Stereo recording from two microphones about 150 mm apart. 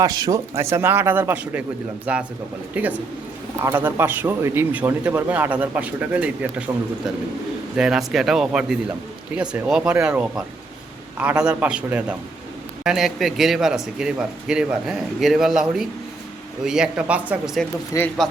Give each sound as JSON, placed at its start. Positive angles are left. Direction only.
{"t": 0.0, "sound": "a man's voice", "side_deg": -25}
{"t": 7.8, "sound": "a man's voice", "side_deg": -5}
{"t": 17.9, "sound": "speech", "side_deg": 25}